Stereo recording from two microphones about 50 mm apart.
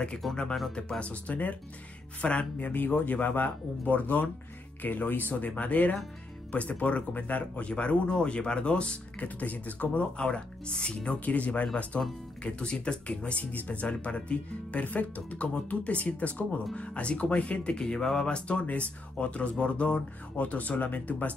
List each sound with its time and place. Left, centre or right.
0.2 s speech: centre
0.7 s speech: left
2.7 s speech: left
11.1 s speech: left